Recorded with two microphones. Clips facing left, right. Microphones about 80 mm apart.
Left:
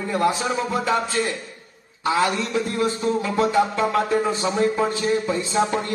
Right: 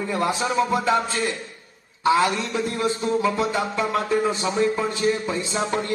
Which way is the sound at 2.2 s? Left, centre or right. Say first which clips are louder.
Left 1 dB; left.